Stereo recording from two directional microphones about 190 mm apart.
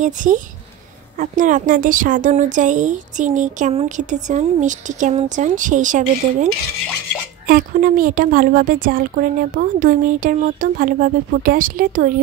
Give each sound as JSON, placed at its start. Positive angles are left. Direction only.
{"t": 0.0, "sound": "a woman's voice", "side_deg": -40}